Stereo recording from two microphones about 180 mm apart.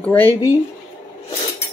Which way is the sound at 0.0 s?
10° left (ahead or behind).